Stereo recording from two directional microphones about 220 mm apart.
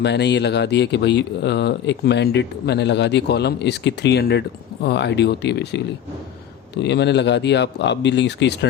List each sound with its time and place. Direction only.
0.0 s speech: 50° left (ahead or behind)
6.8 s speech: 50° left (ahead or behind)